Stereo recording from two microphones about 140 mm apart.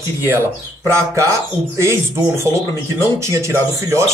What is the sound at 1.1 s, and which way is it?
Speech, 20° right (ahead or behind).